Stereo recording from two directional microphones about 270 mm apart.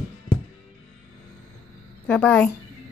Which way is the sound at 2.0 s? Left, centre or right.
Centre.